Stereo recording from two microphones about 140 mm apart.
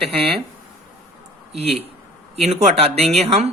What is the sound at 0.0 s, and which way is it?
Speech, 45° right (ahead or behind).